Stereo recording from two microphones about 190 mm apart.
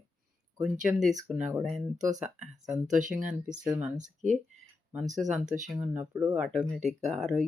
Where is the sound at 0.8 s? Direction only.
Centre (ahead or behind).